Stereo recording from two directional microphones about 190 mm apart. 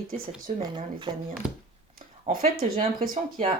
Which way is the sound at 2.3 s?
50° right (ahead or behind).